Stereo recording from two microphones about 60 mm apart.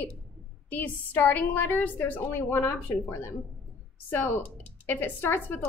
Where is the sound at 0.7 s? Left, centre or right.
Left.